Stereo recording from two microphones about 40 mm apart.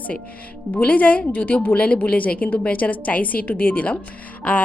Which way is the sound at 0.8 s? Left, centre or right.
Left.